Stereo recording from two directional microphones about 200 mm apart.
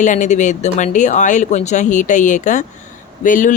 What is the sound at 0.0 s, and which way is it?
Speech, 40° left (ahead or behind).